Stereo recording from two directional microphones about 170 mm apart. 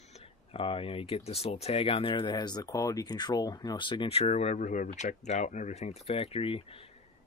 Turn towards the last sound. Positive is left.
turn(degrees=35)  # may be behind; listen again after turning